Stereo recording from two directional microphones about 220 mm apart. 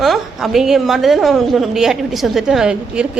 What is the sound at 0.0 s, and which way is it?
A woman's voice, centre (ahead or behind).